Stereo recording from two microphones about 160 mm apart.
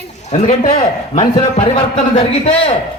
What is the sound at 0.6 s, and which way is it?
A man's voice, 45° left (ahead or behind).